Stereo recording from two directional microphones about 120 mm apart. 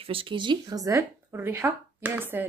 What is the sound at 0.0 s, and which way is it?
A woman's voice, 50° right (ahead or behind).